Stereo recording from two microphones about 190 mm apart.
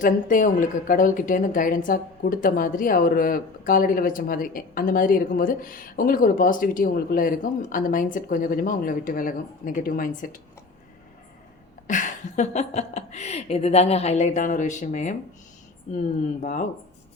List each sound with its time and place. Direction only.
0.0 s a woman's voice: 45° left (ahead or behind)
11.9 s a woman's voice: 40° left (ahead or behind)